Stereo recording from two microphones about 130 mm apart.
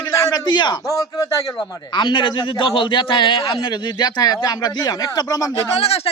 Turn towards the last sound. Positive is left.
turn(degrees=50)  # may be behind; listen again after turning